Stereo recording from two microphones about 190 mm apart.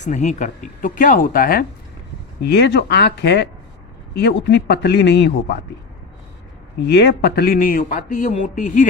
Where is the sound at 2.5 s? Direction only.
60° left (ahead or behind).